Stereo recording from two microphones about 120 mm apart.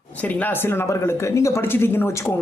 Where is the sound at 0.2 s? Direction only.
15° left (ahead or behind).